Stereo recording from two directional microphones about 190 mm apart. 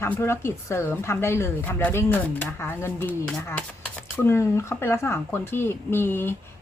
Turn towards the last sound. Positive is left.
turn(degrees=10)  # may be behind; listen again after turning